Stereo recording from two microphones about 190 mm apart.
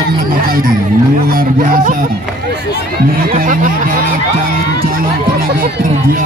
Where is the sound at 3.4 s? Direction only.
45° right (ahead or behind).